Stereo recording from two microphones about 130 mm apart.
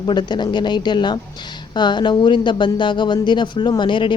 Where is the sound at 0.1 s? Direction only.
35° left (ahead or behind).